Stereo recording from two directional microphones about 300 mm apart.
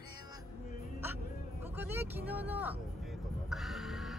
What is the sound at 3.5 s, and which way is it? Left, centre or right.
Music, centre.